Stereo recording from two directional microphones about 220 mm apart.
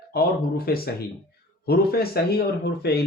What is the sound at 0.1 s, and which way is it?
Speech, 45° left (ahead or behind).